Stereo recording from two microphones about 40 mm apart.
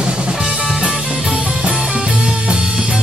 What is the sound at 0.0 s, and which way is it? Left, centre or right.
Music, right.